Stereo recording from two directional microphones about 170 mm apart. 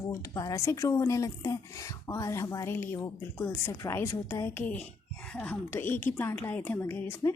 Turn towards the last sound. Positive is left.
turn(degrees=15)  # may be behind; listen again after turning